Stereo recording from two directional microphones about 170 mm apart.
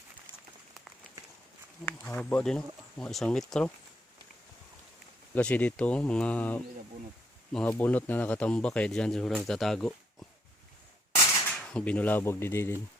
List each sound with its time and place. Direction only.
1.8 s speech: 10° left (ahead or behind)
5.3 s speech: 10° left (ahead or behind)
11.1 s a sound: 25° left (ahead or behind)
11.4 s speech: 5° left (ahead or behind)